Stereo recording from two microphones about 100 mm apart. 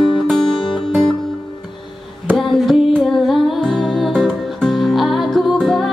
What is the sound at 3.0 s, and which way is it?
Music, centre (ahead or behind).